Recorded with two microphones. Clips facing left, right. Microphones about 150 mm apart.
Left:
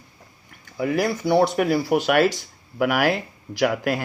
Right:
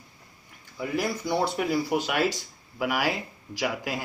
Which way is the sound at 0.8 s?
75° left (ahead or behind).